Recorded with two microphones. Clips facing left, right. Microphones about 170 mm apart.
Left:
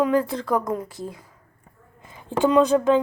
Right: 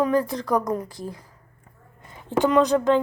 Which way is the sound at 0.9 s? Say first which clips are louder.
Left 1 dB; 20° left (ahead or behind).